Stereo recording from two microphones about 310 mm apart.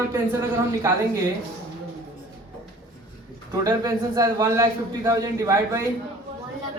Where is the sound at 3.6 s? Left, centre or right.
Centre.